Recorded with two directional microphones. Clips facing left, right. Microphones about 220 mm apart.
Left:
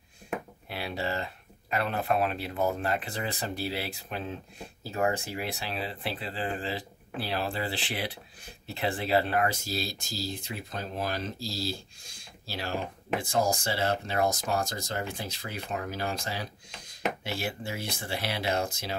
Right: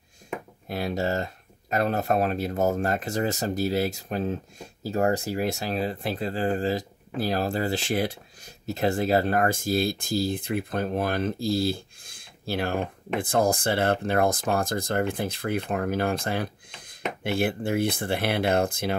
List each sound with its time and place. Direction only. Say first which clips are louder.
0.7 s speech: right 7 dB; 45° right (ahead or behind)